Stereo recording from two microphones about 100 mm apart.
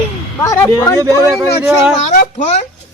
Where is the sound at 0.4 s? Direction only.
30° left (ahead or behind).